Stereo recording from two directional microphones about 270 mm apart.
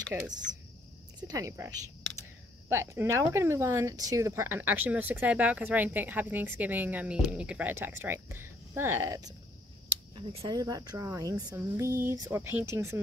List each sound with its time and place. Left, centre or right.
0.1 s speech: centre